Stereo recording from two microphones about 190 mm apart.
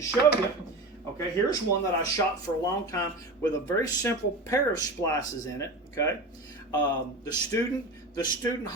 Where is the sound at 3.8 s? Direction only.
15° left (ahead or behind).